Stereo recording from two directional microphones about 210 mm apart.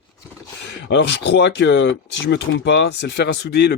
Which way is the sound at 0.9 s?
55° left (ahead or behind).